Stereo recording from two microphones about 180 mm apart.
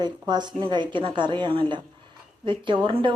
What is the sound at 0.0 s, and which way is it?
A woman's voice, 25° right (ahead or behind).